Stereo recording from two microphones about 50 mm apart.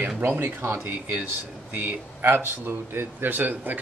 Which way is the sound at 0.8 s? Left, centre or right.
Right.